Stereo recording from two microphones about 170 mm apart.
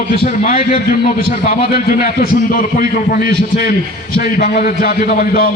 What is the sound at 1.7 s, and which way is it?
A man's voice, 60° left (ahead or behind).